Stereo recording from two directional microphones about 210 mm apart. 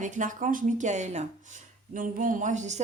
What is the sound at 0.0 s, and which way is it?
Speech, 35° right (ahead or behind).